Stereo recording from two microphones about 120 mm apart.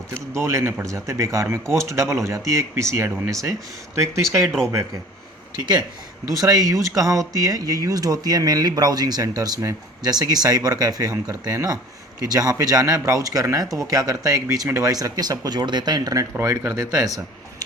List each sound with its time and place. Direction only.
0.1 s speech: 25° right (ahead or behind)
6.2 s speech: 30° right (ahead or behind)